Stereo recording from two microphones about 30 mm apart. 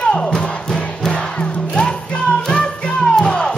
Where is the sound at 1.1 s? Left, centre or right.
Left.